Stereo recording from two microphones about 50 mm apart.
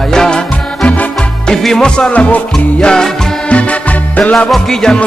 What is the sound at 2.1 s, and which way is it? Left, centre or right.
Music, left.